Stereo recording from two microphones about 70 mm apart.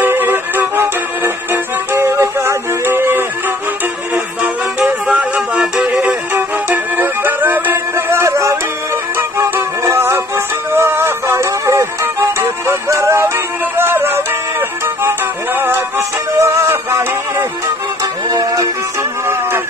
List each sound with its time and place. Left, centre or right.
0.0 s music: right
4.1 s music: right
7.9 s music: right
16.3 s music: right
18.3 s music: right